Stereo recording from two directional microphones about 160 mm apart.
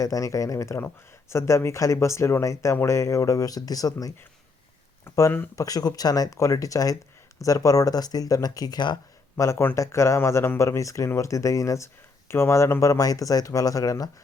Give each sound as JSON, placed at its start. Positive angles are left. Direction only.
{"t": 0.0, "sound": "speech", "side_deg": 20}
{"t": 9.4, "sound": "speech", "side_deg": 15}